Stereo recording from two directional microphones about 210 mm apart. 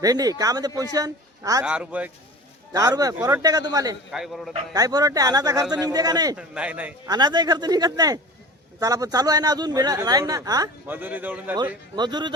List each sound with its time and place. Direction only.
0.0 s a man's voice: 15° right (ahead or behind)
1.6 s a man's voice: 5° right (ahead or behind)
2.7 s a man's voice: 15° right (ahead or behind)
4.1 s a man's voice: centre (ahead or behind)
4.7 s a man's voice: 15° right (ahead or behind)
6.3 s a man's voice: 5° right (ahead or behind)
7.1 s a man's voice: 20° right (ahead or behind)
11.9 s speech: 20° right (ahead or behind)